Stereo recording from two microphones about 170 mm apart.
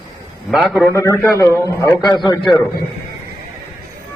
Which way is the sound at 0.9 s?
20° left (ahead or behind).